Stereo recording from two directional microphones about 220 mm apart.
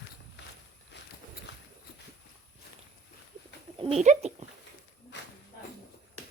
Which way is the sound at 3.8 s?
30° right (ahead or behind).